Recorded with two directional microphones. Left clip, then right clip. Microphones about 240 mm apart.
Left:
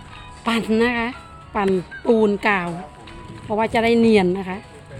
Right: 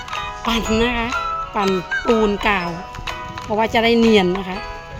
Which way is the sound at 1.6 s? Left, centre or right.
Right.